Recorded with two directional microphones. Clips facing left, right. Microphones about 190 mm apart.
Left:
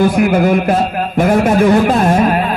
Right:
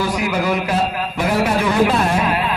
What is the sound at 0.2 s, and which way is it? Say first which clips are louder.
Speech: left 8 dB; 50° left (ahead or behind).